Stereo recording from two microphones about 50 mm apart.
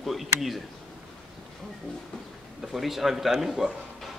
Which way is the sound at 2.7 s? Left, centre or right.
Centre.